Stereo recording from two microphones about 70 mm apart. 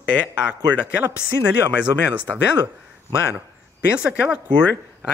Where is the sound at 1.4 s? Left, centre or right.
Right.